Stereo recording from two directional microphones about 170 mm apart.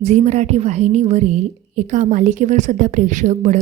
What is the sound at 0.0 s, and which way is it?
A woman's voice, 40° right (ahead or behind).